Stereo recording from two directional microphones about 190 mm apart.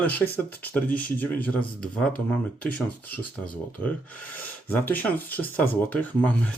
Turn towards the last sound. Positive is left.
turn(degrees=10)  # may be behind; listen again after turning